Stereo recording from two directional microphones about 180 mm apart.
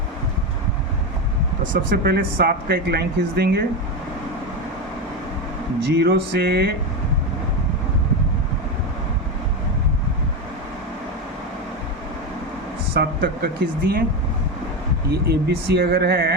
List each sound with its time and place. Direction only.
1.9 s speech: 55° right (ahead or behind)
5.8 s speech: 70° right (ahead or behind)
12.9 s speech: 65° right (ahead or behind)
15.1 s speech: 65° right (ahead or behind)